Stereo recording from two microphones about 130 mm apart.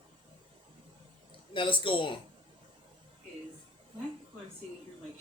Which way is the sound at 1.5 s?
40° left (ahead or behind).